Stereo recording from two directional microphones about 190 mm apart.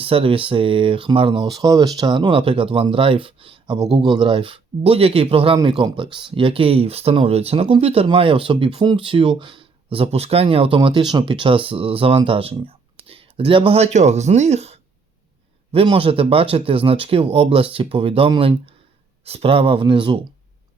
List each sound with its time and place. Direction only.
0.0 s speech: 30° right (ahead or behind)